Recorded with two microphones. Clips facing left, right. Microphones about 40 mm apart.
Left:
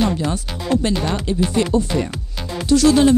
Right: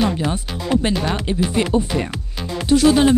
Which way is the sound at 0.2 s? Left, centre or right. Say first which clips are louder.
Even; centre.